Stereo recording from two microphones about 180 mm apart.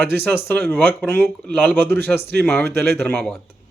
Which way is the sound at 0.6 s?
10° left (ahead or behind).